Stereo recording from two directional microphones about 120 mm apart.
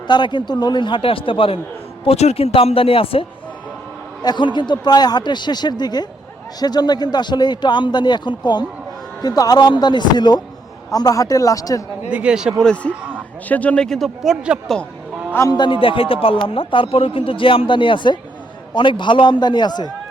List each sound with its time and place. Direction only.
0.1 s speech: 40° left (ahead or behind)
2.0 s speech: 60° left (ahead or behind)
4.2 s speech: 40° left (ahead or behind)
12.0 s speech: 10° right (ahead or behind)
12.6 s speech: 10° left (ahead or behind)
12.9 s a man's voice: 15° right (ahead or behind)
13.5 s speech: 10° left (ahead or behind)
15.3 s a man's voice: 20° left (ahead or behind)
15.5 s speech: 45° left (ahead or behind)